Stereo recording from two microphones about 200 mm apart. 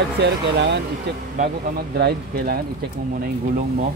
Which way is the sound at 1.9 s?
50° right (ahead or behind).